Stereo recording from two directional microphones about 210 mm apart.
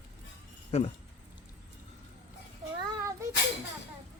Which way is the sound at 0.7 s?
30° left (ahead or behind).